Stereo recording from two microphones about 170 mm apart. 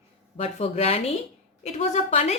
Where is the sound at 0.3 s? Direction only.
35° left (ahead or behind).